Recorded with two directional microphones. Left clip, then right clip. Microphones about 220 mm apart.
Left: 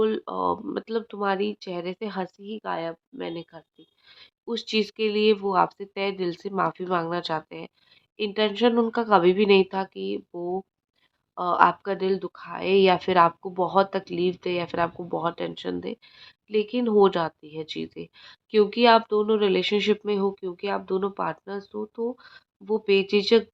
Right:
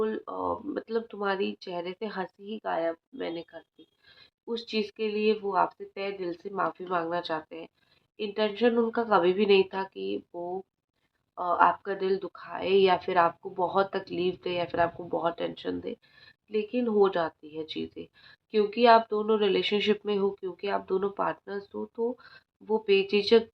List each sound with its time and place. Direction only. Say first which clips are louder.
0.0 s speech: left 6 dB; 40° left (ahead or behind)
4.1 s speech: left 3 dB; 35° left (ahead or behind)